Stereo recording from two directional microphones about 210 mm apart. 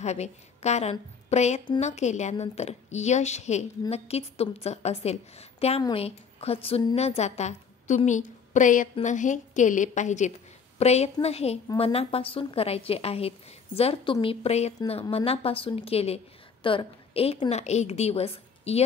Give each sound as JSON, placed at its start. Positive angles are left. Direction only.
{"t": 0.0, "sound": "a woman's voice", "side_deg": 30}